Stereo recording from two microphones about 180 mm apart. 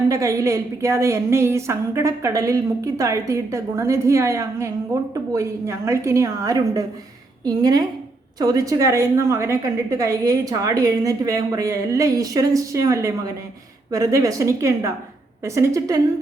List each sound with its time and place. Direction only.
0.1 s a woman's voice: 20° right (ahead or behind)